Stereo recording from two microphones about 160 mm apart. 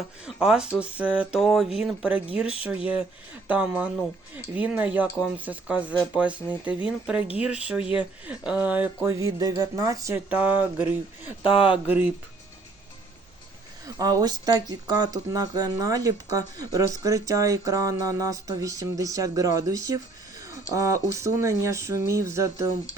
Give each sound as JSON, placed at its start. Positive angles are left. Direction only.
{"t": 0.3, "sound": "speech", "side_deg": -5}
{"t": 10.2, "sound": "speech", "side_deg": -10}
{"t": 11.5, "sound": "speech", "side_deg": 35}
{"t": 11.9, "sound": "speech", "side_deg": -10}
{"t": 13.8, "sound": "speech", "side_deg": -25}